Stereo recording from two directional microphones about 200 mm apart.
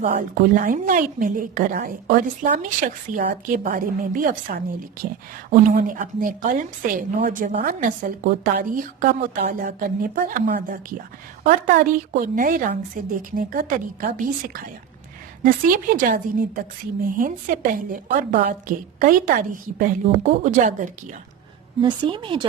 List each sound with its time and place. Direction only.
0.0 s a woman's voice: 40° right (ahead or behind)
21.8 s a woman's voice: 25° right (ahead or behind)